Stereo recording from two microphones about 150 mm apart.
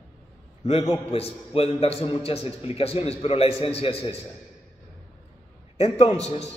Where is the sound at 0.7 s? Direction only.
40° left (ahead or behind).